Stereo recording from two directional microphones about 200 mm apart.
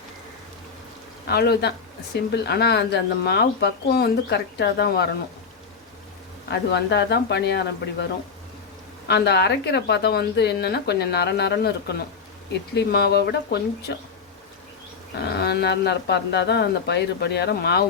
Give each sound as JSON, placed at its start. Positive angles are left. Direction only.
{"t": 1.3, "sound": "a woman's voice", "side_deg": 55}
{"t": 6.5, "sound": "a woman's voice", "side_deg": 55}
{"t": 9.0, "sound": "a woman's voice", "side_deg": 55}
{"t": 15.4, "sound": "a woman's voice", "side_deg": 55}